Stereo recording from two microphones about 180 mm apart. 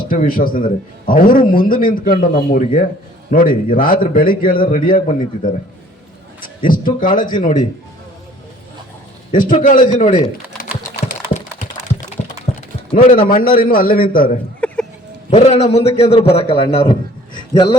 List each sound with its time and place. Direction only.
0.1 s a man's voice: 50° left (ahead or behind)
6.6 s a man's voice: 50° left (ahead or behind)
9.3 s a man's voice: 45° left (ahead or behind)
11.0 s computer keyboard: 40° left (ahead or behind)
12.5 s a sound: 35° left (ahead or behind)
13.1 s a man's voice: 55° left (ahead or behind)
14.6 s a sound: 10° left (ahead or behind)
15.3 s a man's voice: 35° left (ahead or behind)